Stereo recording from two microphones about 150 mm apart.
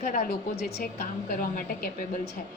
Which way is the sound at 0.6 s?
90° left.